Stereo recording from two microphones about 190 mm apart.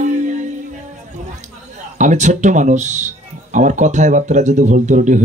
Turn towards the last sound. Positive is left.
turn(degrees=-40)  # may be behind; listen again after turning